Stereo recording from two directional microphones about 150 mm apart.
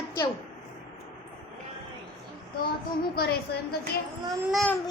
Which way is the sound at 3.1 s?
90° left.